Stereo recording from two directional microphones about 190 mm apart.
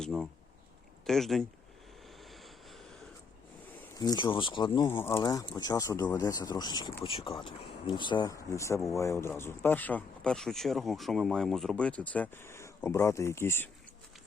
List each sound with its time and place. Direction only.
0.0 s speech: centre (ahead or behind)
2.3 s vehicle: centre (ahead or behind)
3.9 s speech: 20° left (ahead or behind)
4.9 s speech: 10° left (ahead or behind)